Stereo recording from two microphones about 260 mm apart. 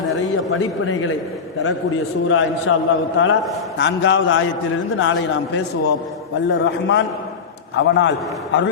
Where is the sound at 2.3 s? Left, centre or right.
Left.